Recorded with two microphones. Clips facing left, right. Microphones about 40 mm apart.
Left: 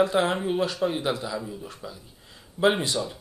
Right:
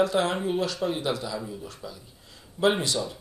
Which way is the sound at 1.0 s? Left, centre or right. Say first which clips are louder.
Left 1 dB; centre.